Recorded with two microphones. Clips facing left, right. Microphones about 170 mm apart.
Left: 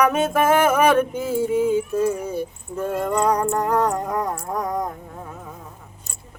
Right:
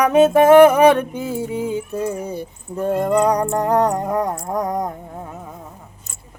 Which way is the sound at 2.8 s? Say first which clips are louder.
Right 5 dB; 35° right (ahead or behind).